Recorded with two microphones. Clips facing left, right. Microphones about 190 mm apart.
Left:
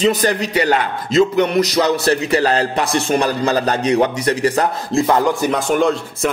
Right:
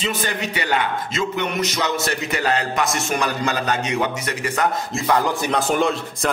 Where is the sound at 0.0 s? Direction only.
40° left (ahead or behind).